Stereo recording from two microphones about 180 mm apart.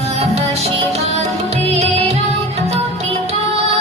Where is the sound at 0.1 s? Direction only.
35° right (ahead or behind).